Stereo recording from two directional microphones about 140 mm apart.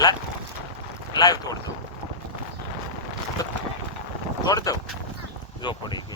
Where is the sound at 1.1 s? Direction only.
30° left (ahead or behind).